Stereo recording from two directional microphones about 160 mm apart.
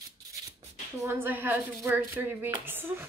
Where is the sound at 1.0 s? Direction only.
15° right (ahead or behind).